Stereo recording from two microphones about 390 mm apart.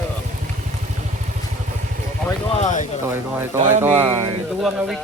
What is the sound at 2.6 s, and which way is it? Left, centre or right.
Speech, centre.